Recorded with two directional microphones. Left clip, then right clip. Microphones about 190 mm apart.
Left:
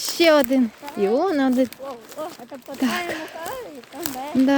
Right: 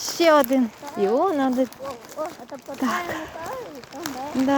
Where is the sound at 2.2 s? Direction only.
15° left (ahead or behind).